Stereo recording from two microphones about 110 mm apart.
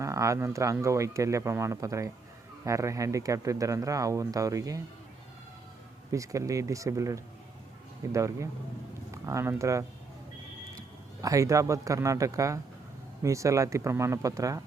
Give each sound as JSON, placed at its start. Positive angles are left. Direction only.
{"t": 0.0, "sound": "speech", "side_deg": -30}
{"t": 6.1, "sound": "speech", "side_deg": -30}
{"t": 11.2, "sound": "speech", "side_deg": -30}